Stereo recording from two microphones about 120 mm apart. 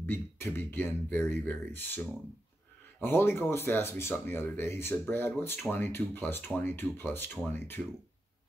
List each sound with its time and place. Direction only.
0.0 s speech: 15° left (ahead or behind)
3.0 s speech: 20° left (ahead or behind)